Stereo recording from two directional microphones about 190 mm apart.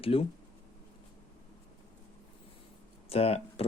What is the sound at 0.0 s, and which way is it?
Speech, 30° left (ahead or behind).